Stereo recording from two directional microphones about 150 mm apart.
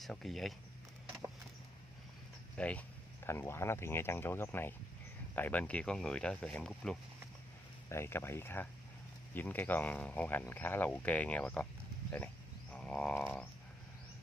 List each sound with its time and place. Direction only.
0.0 s speech: centre (ahead or behind)
2.5 s speech: 10° left (ahead or behind)
7.9 s speech: 15° left (ahead or behind)
12.7 s wild animals: 5° left (ahead or behind)